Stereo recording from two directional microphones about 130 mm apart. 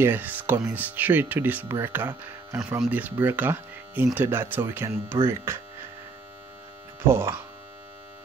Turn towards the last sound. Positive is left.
turn(degrees=-20)  # may be behind; listen again after turning